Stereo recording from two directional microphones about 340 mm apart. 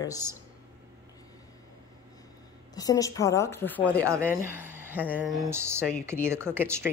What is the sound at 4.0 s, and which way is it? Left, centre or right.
Speech, centre.